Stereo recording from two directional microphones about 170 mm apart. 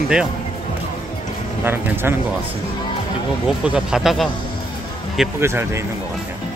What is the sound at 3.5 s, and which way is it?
Speech, 5° right (ahead or behind).